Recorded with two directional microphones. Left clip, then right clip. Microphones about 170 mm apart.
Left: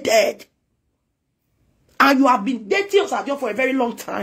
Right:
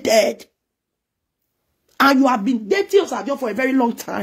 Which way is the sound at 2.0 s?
35° right (ahead or behind).